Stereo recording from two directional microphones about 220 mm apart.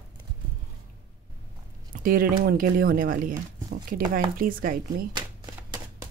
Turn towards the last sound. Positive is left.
turn(degrees=-40)  # may be behind; listen again after turning